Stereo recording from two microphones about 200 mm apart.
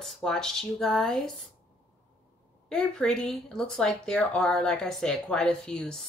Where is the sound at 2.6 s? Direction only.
5° left (ahead or behind).